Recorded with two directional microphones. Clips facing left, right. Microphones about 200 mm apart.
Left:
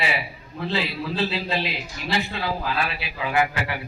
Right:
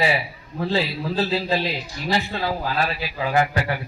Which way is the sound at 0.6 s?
45° right (ahead or behind).